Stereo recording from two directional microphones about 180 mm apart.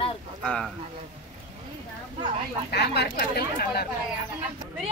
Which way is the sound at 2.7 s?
65° left (ahead or behind).